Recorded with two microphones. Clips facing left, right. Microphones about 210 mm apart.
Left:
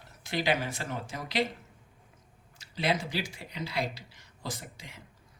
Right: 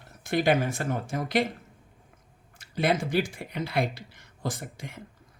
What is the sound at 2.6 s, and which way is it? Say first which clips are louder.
Speech: right 4 dB; 50° right (ahead or behind).